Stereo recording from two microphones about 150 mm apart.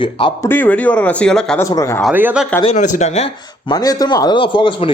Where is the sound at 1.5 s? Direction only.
20° left (ahead or behind).